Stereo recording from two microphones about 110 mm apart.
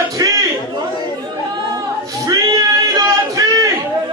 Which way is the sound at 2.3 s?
30° right (ahead or behind).